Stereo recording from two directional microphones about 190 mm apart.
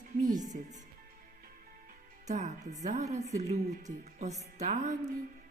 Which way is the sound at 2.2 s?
40° right (ahead or behind).